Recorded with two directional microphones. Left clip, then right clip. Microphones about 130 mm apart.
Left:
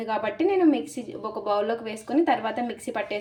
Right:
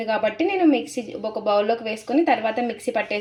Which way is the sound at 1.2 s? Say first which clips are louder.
Right 5 dB; 35° right (ahead or behind).